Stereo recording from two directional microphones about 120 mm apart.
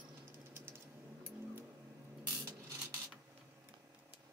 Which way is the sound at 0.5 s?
20° right (ahead or behind).